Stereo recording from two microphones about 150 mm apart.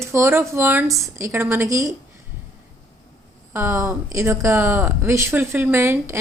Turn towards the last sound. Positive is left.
turn(degrees=-15)  # may be behind; listen again after turning